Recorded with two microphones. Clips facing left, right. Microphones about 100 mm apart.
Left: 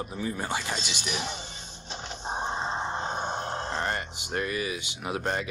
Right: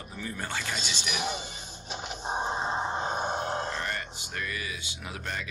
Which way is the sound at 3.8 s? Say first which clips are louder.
Left 4 dB; 30° left (ahead or behind).